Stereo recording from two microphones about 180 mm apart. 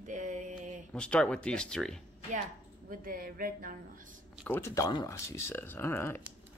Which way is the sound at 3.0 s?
55° right (ahead or behind).